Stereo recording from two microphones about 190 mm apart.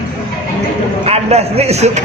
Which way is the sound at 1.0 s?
35° right (ahead or behind).